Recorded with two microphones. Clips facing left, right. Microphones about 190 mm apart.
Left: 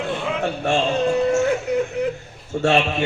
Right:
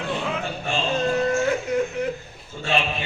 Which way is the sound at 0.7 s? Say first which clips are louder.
Left 8 dB; 70° left (ahead or behind).